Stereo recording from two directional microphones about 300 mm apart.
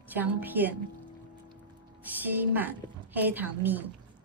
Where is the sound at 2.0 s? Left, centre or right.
Centre.